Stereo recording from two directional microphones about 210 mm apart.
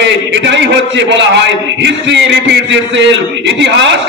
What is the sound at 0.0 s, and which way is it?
A man's voice, 55° right (ahead or behind).